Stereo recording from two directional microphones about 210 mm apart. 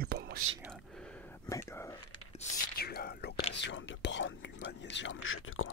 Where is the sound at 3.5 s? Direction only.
55° left (ahead or behind).